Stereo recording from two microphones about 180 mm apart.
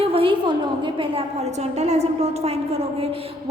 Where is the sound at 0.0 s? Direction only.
30° right (ahead or behind).